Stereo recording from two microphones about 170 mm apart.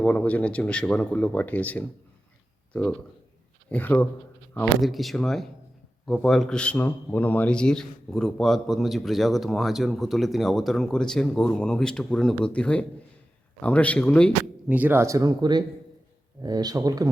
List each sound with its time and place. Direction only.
0.0 s speech: 10° left (ahead or behind)
3.7 s speech: 10° left (ahead or behind)
4.8 s a man's voice: centre (ahead or behind)
14.7 s speech: 10° right (ahead or behind)